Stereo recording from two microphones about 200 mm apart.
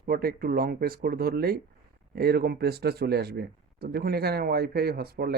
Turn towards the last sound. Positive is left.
turn(degrees=-50)  # may be behind; listen again after turning